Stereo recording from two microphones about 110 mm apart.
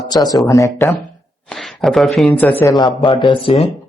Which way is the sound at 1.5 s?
Centre (ahead or behind).